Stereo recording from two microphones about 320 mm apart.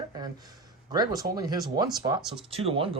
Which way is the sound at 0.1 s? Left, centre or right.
Centre.